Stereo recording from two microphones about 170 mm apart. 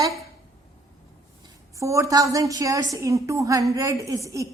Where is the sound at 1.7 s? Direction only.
20° right (ahead or behind).